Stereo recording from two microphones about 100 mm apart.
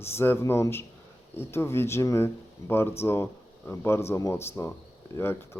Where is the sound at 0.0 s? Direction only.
25° left (ahead or behind).